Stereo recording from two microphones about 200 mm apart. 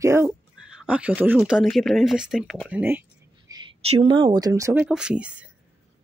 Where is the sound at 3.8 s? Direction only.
25° right (ahead or behind).